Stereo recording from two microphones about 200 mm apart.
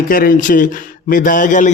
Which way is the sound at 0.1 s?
45° left (ahead or behind).